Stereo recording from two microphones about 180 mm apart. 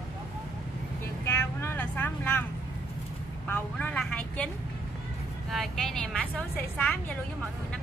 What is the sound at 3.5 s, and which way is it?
Vehicle, 10° left (ahead or behind).